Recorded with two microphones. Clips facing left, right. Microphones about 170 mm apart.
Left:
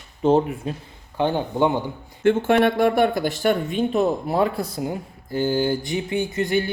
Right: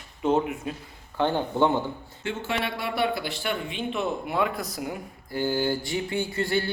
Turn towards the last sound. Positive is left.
turn(degrees=20)  # may be behind; listen again after turning